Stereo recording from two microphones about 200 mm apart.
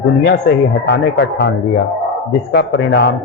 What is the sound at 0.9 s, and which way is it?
A man's voice, 60° left (ahead or behind).